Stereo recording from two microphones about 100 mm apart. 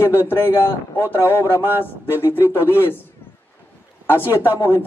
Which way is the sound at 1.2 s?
25° left (ahead or behind).